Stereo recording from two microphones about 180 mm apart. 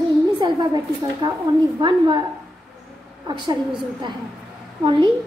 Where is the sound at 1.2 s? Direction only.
25° right (ahead or behind).